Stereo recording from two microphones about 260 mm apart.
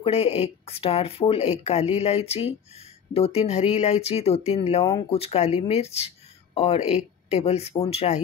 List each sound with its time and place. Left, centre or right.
0.0 s speech: left